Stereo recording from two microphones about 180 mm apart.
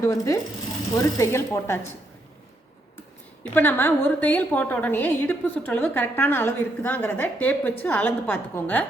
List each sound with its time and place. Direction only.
0.0 s a woman's voice: 15° left (ahead or behind)
3.5 s a woman's voice: 10° left (ahead or behind)